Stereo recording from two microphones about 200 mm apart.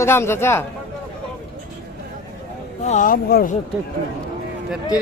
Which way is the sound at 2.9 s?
40° left (ahead or behind).